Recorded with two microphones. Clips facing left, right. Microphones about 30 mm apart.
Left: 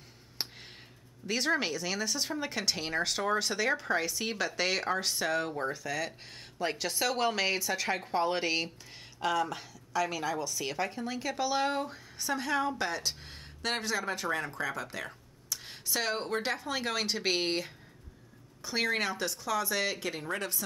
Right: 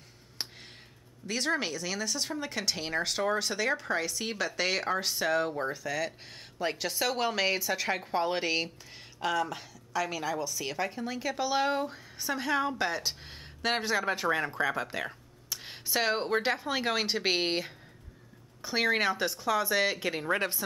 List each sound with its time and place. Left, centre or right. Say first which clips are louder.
1.2 s a woman's voice: left 1 dB; centre; by 20.6 s right